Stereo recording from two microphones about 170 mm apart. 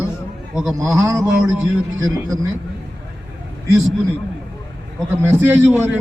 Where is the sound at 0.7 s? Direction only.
20° right (ahead or behind).